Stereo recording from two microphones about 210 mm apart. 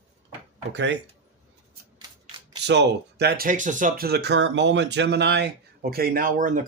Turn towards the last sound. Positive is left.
turn(degrees=-40)  # may be behind; listen again after turning